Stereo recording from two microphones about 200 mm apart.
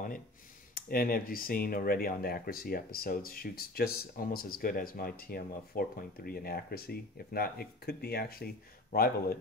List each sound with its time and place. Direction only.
0.7 s speech: 45° left (ahead or behind)